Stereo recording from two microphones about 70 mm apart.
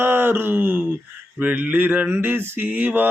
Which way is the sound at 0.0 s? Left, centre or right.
Right.